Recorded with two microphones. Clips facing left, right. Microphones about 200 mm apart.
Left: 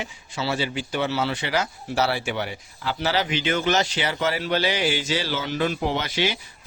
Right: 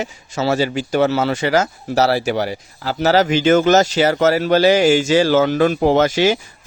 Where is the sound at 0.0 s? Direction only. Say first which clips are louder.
Right 8 dB; 45° right (ahead or behind).